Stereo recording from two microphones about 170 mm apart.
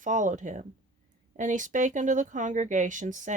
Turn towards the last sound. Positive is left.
turn(degrees=-50)  # may be behind; listen again after turning